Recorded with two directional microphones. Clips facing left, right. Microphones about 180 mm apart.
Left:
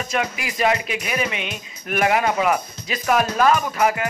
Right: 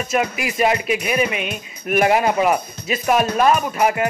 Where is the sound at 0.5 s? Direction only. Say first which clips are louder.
Right 2 dB; 25° right (ahead or behind).